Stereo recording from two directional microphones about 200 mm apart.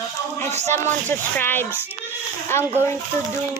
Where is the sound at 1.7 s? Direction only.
10° right (ahead or behind).